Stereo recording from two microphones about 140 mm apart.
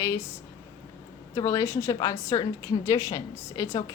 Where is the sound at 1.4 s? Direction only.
20° left (ahead or behind).